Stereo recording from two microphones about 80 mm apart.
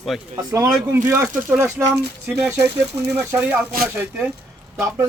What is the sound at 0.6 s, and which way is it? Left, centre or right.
Speech, right.